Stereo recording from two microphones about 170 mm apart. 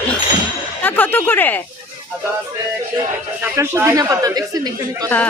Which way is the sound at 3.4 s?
15° right (ahead or behind).